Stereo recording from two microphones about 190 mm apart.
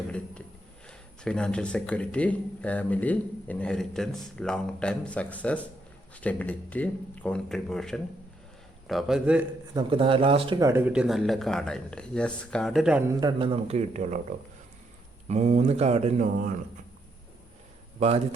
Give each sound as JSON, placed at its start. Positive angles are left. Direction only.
{"t": 0.9, "sound": "speech", "side_deg": 5}
{"t": 9.7, "sound": "speech", "side_deg": -25}
{"t": 10.7, "sound": "speech", "side_deg": -10}
{"t": 13.1, "sound": "speech", "side_deg": -25}
{"t": 18.0, "sound": "speech", "side_deg": -35}